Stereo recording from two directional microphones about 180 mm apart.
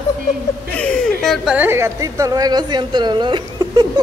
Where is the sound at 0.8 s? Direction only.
Centre (ahead or behind).